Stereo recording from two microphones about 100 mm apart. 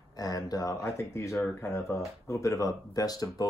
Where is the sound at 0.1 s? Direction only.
40° left (ahead or behind).